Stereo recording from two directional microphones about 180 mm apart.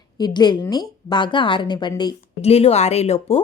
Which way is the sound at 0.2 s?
25° left (ahead or behind).